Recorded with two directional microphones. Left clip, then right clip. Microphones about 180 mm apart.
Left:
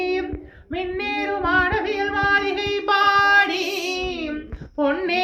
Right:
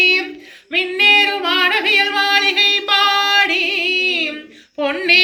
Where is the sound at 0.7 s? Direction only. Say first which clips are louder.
Right 13 dB; 35° left (ahead or behind).